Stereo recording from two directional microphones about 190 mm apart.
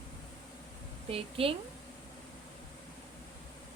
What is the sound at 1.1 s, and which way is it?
Speech, 30° right (ahead or behind).